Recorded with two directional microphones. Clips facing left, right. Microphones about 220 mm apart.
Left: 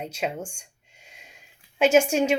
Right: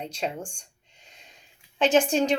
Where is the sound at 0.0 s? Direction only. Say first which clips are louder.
Left 2 dB; 5° left (ahead or behind).